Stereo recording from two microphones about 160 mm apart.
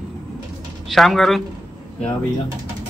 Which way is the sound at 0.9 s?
Centre (ahead or behind).